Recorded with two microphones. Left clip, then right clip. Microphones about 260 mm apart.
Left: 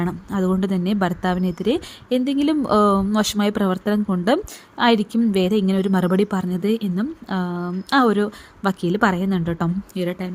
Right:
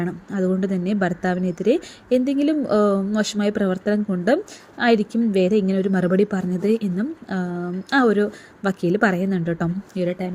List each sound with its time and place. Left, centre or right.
0.0 s speech: left